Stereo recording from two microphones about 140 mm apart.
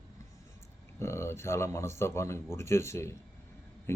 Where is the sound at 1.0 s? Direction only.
20° left (ahead or behind).